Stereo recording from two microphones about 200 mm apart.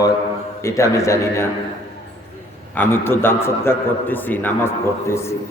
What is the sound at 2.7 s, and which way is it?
A man's voice, 10° left (ahead or behind).